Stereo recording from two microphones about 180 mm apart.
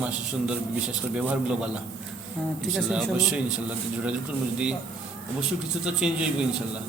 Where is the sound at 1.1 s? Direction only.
5° right (ahead or behind).